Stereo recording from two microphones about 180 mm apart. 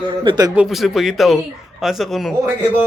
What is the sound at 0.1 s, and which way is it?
Speech, 25° right (ahead or behind).